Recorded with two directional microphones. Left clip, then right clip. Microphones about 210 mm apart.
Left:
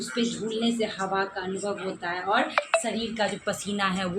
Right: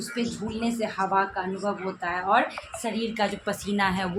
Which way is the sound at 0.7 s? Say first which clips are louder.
Right 3 dB; 25° right (ahead or behind).